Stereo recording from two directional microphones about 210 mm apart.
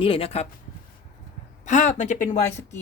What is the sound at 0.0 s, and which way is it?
Speech, 25° left (ahead or behind).